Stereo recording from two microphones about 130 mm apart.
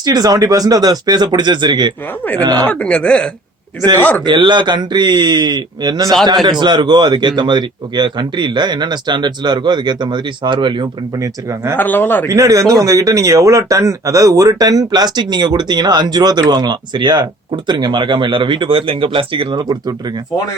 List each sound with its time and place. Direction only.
0.0 s a man's voice: 30° right (ahead or behind)
2.6 s speech: 10° left (ahead or behind)
4.3 s a man's voice: 35° right (ahead or behind)
11.2 s speech: 25° right (ahead or behind)
11.8 s speech: 15° left (ahead or behind)
12.3 s a man's voice: 25° right (ahead or behind)